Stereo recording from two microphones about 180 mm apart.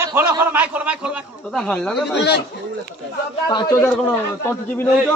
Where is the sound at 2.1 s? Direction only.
70° left (ahead or behind).